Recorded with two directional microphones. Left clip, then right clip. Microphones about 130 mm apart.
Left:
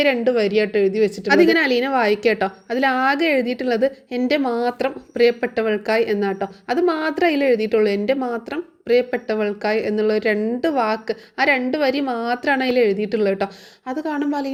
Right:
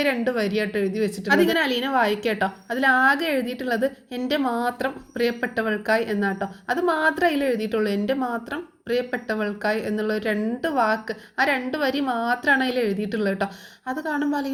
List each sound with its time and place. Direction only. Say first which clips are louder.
0.0 s a woman's voice: left 6 dB; 45° left (ahead or behind)